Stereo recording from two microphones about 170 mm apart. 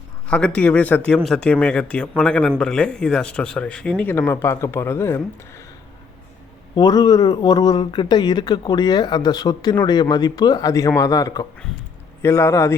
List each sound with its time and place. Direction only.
0.3 s speech: 5° left (ahead or behind)
6.7 s speech: 25° left (ahead or behind)